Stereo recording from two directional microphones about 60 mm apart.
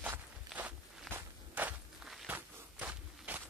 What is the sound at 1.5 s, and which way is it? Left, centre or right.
Walk, right.